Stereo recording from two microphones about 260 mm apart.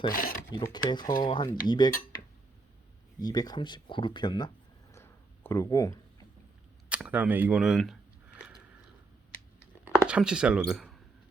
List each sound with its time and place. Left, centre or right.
0.1 s speech: left
0.5 s speech: centre
3.2 s speech: centre
4.9 s a sound: centre
6.9 s a sound: centre
10.1 s speech: centre